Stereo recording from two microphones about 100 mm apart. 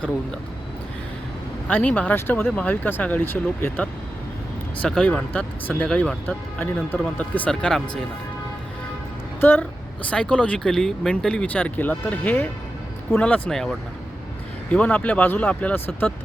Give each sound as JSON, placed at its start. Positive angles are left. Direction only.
{"t": 1.6, "sound": "speech", "side_deg": 15}
{"t": 4.8, "sound": "speech", "side_deg": 5}
{"t": 6.2, "sound": "speech", "side_deg": 20}
{"t": 9.4, "sound": "speech", "side_deg": 20}